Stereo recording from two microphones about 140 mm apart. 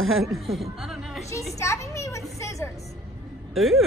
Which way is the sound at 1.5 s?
20° left (ahead or behind).